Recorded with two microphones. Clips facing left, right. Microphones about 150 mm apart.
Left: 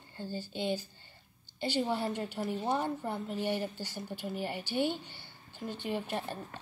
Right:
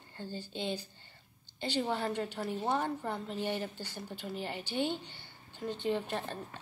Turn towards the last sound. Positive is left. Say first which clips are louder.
# right 1 dB
turn(degrees=10)  # may be behind; listen again after turning